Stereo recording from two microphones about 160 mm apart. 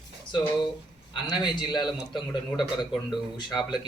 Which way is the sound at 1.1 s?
25° left (ahead or behind).